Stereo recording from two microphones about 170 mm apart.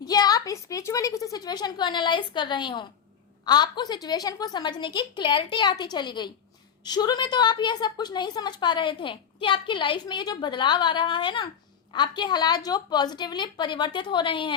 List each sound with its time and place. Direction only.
0.0 s a woman's voice: 25° left (ahead or behind)